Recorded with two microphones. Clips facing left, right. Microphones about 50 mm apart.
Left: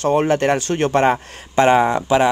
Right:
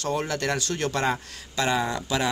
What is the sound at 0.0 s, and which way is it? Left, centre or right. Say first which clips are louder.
A man's voice: left 11 dB; left.